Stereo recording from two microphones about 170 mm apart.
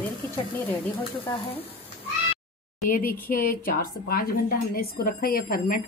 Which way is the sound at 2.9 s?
55° left (ahead or behind).